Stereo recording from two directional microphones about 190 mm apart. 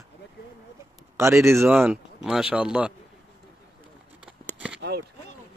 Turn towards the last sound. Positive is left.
turn(degrees=-60)  # may be behind; listen again after turning